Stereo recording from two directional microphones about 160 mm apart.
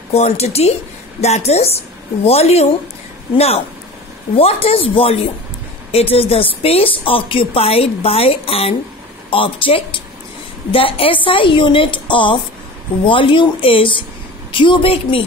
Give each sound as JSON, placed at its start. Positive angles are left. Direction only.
{"t": 0.1, "sound": "a woman's voice", "side_deg": 40}